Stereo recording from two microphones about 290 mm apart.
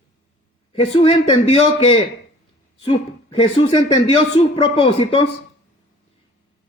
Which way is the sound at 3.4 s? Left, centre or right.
Centre.